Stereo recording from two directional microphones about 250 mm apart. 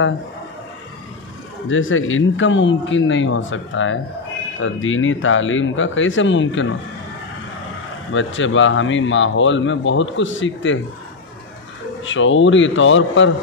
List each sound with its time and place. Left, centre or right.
1.7 s a man's voice: left
8.1 s a man's voice: left
12.0 s a man's voice: left